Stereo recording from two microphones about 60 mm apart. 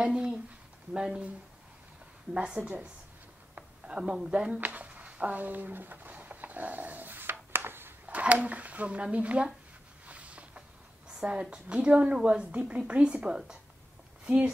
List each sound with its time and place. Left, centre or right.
0.0 s a woman's voice: centre
2.3 s a woman's voice: centre
4.6 s a sound: right
8.1 s speech: right
10.0 s a sound: right
11.1 s a woman's voice: centre